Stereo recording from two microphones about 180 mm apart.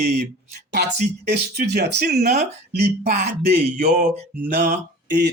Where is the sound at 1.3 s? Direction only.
65° right (ahead or behind).